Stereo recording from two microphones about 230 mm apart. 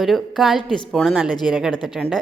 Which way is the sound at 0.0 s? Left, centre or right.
Centre.